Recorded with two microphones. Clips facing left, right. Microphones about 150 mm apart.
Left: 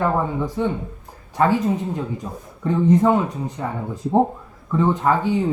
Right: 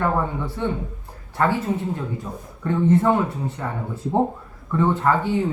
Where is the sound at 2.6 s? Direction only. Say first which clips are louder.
Left 2 dB; 15° left (ahead or behind).